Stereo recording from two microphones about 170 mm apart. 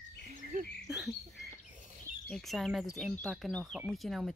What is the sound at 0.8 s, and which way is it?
Rodents, centre (ahead or behind).